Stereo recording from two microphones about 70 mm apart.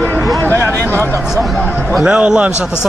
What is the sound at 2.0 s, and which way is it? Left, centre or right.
Speech, centre.